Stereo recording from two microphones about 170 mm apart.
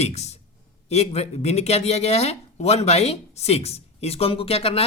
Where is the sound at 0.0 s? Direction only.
40° left (ahead or behind).